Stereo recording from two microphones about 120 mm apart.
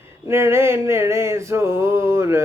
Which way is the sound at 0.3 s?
20° right (ahead or behind).